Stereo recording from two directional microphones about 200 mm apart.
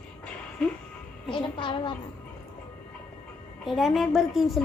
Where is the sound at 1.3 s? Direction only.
25° left (ahead or behind).